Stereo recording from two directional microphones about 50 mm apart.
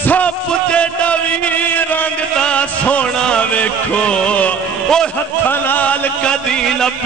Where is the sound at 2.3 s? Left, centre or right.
Left.